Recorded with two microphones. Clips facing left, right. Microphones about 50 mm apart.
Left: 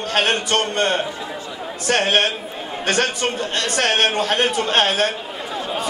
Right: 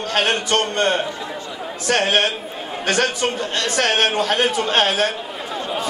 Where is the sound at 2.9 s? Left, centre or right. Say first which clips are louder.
Right 1 dB; left.